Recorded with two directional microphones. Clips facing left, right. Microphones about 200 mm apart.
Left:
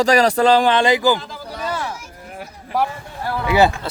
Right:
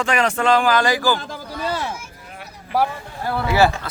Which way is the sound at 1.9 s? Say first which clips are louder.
Left 2 dB; 40° left (ahead or behind).